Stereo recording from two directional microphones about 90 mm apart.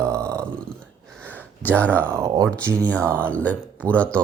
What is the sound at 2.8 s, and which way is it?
Speech, 15° left (ahead or behind).